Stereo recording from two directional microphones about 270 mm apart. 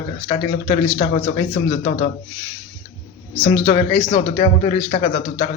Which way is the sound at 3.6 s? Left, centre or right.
Left.